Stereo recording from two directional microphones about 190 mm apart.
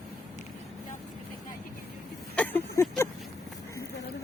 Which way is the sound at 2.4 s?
10° left (ahead or behind).